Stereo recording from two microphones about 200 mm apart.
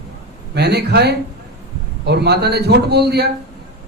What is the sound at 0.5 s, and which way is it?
A man's voice, 55° right (ahead or behind).